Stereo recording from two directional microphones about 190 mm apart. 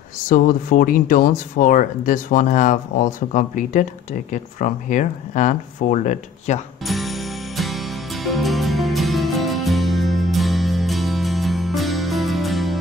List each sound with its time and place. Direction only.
0.3 s speech: 45° left (ahead or behind)
6.9 s music: centre (ahead or behind)